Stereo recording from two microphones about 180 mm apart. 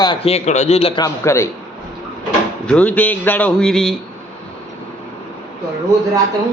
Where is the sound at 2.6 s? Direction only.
5° left (ahead or behind).